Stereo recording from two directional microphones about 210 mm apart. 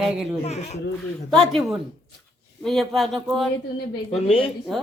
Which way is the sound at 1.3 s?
5° left (ahead or behind).